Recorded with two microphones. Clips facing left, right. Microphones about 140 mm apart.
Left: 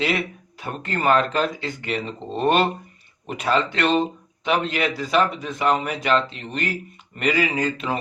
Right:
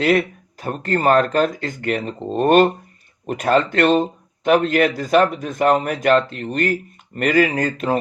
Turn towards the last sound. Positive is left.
turn(degrees=-45)  # may be behind; listen again after turning